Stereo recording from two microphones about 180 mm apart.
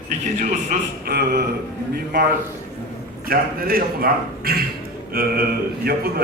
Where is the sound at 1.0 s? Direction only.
60° right (ahead or behind).